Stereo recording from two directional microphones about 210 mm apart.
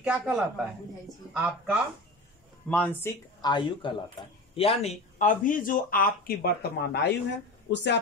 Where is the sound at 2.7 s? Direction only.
5° left (ahead or behind).